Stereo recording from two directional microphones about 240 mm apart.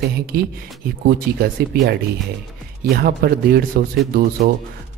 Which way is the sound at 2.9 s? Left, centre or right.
Right.